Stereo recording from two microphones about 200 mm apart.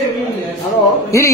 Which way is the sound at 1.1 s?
15° left (ahead or behind).